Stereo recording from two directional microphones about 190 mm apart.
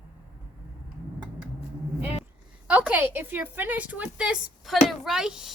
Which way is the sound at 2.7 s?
10° right (ahead or behind).